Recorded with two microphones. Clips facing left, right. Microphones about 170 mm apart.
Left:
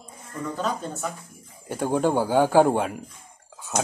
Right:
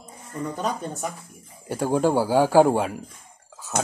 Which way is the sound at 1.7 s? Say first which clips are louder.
Right 1 dB; 5° right (ahead or behind).